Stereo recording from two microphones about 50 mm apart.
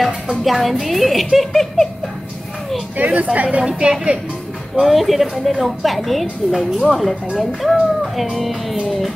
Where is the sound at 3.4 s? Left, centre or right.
Centre.